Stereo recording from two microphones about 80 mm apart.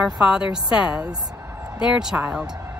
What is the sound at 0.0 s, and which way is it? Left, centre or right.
A woman's voice, centre.